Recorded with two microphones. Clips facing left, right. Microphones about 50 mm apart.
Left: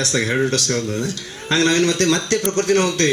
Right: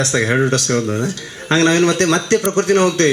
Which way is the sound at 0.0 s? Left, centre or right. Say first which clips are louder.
Right 3 dB; right.